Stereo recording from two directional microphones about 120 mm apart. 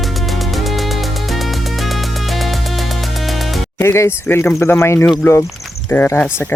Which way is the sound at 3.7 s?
20° left (ahead or behind).